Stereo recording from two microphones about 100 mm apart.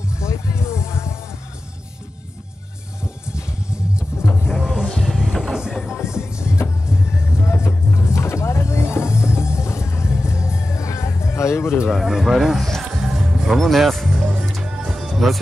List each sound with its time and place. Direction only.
0.2 s music: 30° left (ahead or behind)
4.5 s music: 5° right (ahead or behind)
5.0 s vehicle: centre (ahead or behind)
6.1 s music: 10° right (ahead or behind)
7.5 s vehicle: 25° left (ahead or behind)
11.8 s music: 5° right (ahead or behind)